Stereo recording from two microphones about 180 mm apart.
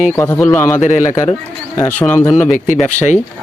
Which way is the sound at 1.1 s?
20° left (ahead or behind).